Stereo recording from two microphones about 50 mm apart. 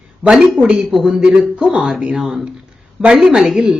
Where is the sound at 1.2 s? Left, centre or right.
Right.